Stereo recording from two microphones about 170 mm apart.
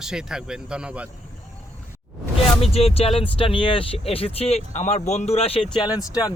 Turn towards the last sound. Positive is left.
turn(degrees=20)  # may be behind; listen again after turning